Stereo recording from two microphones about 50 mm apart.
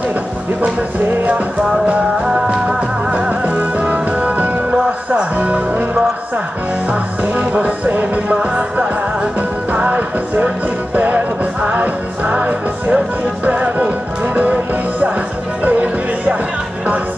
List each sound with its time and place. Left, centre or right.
0.6 s music: right
3.1 s music: right
6.9 s music: right